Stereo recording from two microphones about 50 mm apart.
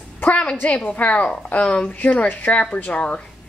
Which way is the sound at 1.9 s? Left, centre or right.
Left.